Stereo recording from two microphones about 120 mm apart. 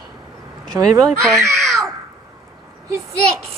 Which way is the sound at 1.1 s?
Centre (ahead or behind).